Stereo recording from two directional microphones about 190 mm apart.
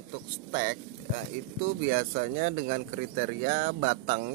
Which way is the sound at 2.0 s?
45° right (ahead or behind).